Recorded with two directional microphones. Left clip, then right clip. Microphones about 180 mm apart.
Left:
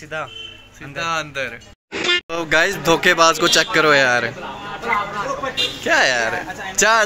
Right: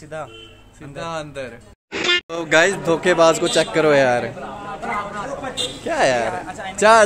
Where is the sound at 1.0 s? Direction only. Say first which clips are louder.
Left 5 dB; 15° right (ahead or behind).